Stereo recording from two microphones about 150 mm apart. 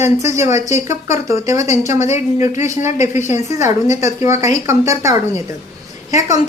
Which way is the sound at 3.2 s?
20° right (ahead or behind).